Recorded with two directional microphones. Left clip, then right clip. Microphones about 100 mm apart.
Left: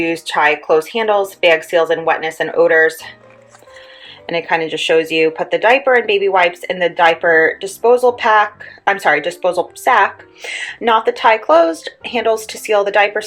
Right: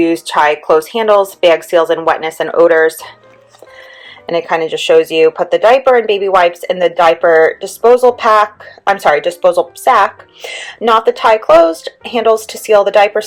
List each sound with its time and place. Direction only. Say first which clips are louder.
0.0 s speech: right 4 dB; 30° right (ahead or behind)
4.3 s a woman's voice: right 3 dB; 30° right (ahead or behind)